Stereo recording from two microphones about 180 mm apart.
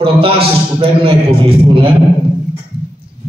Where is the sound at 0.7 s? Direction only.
30° right (ahead or behind).